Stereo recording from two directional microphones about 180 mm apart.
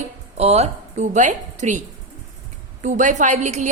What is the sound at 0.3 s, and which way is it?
A woman's voice, 35° right (ahead or behind).